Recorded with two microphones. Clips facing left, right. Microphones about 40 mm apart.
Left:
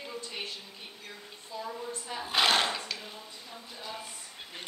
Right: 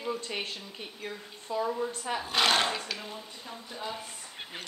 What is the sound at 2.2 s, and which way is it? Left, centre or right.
Speech, centre.